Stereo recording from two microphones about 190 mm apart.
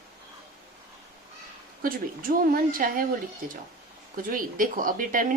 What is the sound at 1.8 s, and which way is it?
Speech, 50° right (ahead or behind).